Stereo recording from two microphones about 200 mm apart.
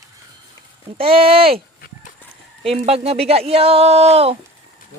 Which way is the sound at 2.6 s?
30° right (ahead or behind).